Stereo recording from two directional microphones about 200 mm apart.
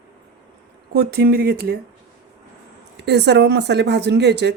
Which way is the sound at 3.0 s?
55° right (ahead or behind).